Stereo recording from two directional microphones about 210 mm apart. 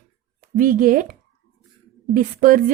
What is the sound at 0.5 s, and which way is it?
Speech, 40° right (ahead or behind).